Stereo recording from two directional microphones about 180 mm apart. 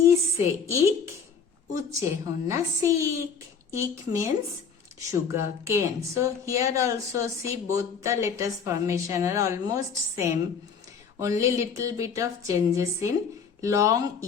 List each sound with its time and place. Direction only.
1.7 s a woman's voice: 20° right (ahead or behind)